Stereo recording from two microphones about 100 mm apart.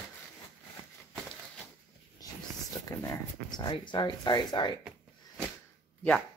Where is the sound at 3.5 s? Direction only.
50° left (ahead or behind).